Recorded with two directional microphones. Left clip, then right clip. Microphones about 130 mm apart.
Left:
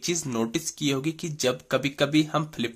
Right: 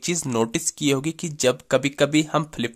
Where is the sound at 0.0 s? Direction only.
45° right (ahead or behind).